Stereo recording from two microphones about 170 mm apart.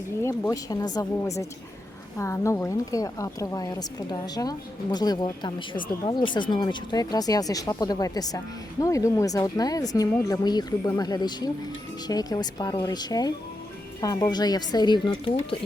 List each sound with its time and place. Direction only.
0.2 s a woman's voice: 15° left (ahead or behind)